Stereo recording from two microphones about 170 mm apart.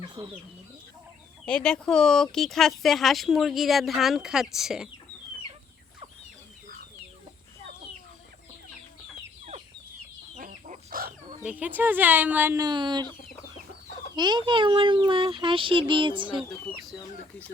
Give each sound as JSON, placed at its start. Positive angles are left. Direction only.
{"t": 0.2, "sound": "a child's voice", "side_deg": -30}
{"t": 1.5, "sound": "speech", "side_deg": 5}
{"t": 10.3, "sound": "chicken", "side_deg": -50}
{"t": 11.4, "sound": "speech", "side_deg": -10}
{"t": 13.1, "sound": "chicken", "side_deg": 10}
{"t": 14.2, "sound": "a child's voice", "side_deg": -25}